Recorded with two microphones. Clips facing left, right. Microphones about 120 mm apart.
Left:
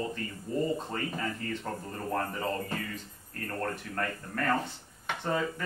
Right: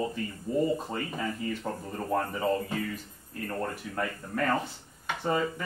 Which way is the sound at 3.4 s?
10° right (ahead or behind).